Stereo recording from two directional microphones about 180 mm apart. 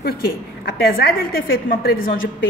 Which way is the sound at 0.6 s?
60° left (ahead or behind).